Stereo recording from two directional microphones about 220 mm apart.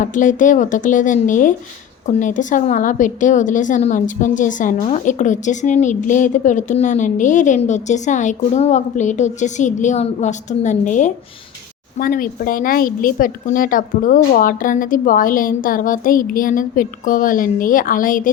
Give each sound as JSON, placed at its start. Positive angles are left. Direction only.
{"t": 0.0, "sound": "a woman's voice", "side_deg": 35}